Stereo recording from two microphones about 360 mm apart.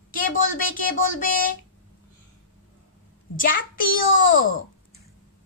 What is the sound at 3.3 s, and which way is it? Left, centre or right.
Speech, left.